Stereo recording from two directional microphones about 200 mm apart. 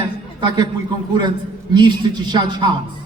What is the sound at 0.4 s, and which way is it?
Speech, 20° right (ahead or behind).